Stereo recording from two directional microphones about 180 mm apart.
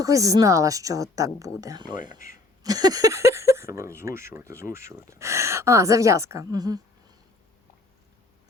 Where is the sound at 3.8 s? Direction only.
15° right (ahead or behind).